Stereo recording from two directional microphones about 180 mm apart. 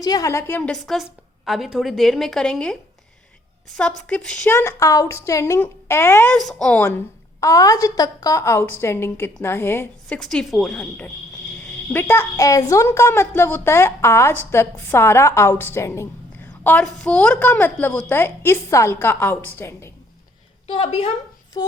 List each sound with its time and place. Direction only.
0.0 s a woman's voice: 20° left (ahead or behind); by 2.7 s 5° left (ahead or behind)
3.8 s a woman's voice: 5° left (ahead or behind)
10.2 s a woman's voice: centre (ahead or behind)
20.7 s a woman's voice: 30° left (ahead or behind)